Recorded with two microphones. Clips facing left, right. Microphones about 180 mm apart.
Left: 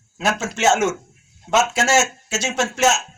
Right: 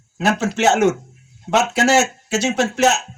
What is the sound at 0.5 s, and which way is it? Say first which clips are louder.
A man's voice: right 2 dB; 65° right (ahead or behind).